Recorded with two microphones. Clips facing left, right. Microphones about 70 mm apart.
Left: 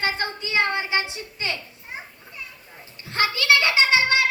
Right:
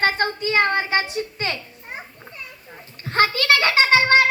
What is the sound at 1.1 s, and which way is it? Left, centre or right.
Children playing, right.